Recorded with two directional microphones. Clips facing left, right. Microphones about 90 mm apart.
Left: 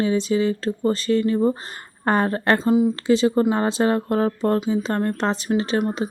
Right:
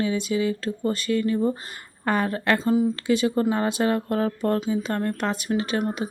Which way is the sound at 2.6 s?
25° left (ahead or behind).